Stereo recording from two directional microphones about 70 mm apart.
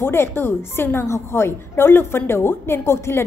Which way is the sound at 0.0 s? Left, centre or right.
Left.